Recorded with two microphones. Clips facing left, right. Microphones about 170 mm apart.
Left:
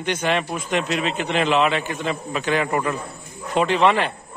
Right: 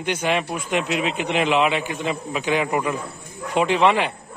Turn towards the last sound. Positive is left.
turn(degrees=-15)  # may be behind; listen again after turning